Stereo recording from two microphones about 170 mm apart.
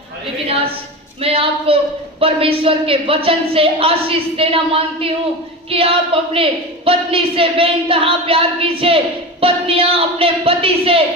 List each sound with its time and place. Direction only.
1.2 s a woman's voice: 35° right (ahead or behind)